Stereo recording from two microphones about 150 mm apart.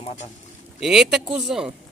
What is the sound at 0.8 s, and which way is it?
Speech, 5° right (ahead or behind).